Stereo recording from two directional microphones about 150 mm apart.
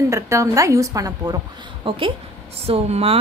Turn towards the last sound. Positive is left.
turn(degrees=-45)  # may be behind; listen again after turning